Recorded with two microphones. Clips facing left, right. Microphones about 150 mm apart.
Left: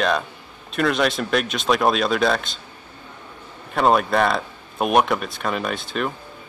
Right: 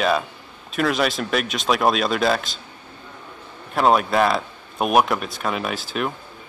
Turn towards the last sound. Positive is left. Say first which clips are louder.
# even
turn(degrees=0)  # may be behind; listen again after turning